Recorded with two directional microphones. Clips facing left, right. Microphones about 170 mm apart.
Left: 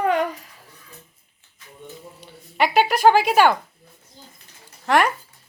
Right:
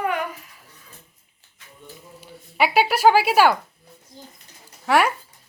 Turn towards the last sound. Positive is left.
turn(degrees=-10)  # may be behind; listen again after turning